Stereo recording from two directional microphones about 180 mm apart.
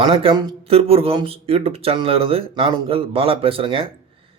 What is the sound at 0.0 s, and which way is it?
A man's voice, 30° right (ahead or behind).